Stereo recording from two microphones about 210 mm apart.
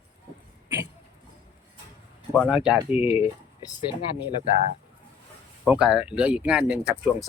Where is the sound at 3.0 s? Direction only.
25° left (ahead or behind).